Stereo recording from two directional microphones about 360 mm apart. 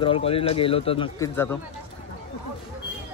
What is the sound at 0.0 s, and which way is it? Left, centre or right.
Speech, centre.